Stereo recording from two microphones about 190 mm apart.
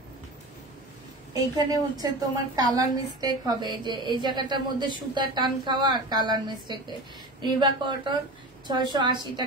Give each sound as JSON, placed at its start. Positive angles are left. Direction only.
{"t": 1.3, "sound": "a woman's voice", "side_deg": -20}